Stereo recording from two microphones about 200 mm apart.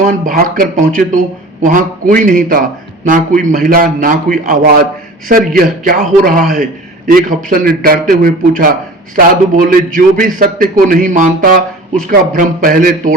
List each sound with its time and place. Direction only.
0.0 s a man's voice: 40° right (ahead or behind)